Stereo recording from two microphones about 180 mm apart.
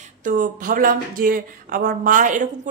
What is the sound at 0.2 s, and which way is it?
Speech, 50° right (ahead or behind).